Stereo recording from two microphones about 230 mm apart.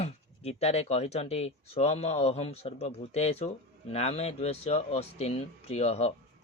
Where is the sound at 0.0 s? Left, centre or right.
Left.